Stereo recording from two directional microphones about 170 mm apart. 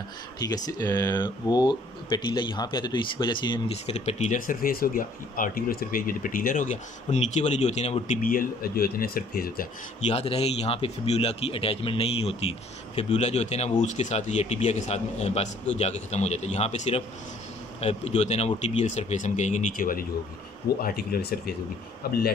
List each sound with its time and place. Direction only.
0.4 s speech: 25° left (ahead or behind); by 8.2 s 40° left (ahead or behind)
8.2 s speech: 55° left (ahead or behind)
10.0 s speech: 35° left (ahead or behind); by 21.4 s 65° left (ahead or behind)